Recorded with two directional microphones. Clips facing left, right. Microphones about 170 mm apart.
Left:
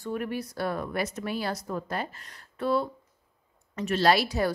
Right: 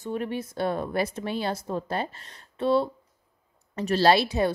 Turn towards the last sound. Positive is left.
turn(degrees=-25)  # may be behind; listen again after turning